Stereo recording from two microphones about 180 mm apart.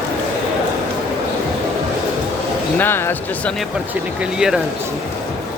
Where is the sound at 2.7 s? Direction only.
10° left (ahead or behind).